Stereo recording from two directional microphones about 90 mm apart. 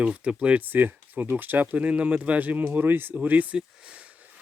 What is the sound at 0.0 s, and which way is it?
Speech, 15° right (ahead or behind).